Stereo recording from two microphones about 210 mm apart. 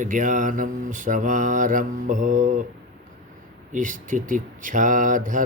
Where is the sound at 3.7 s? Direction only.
40° right (ahead or behind).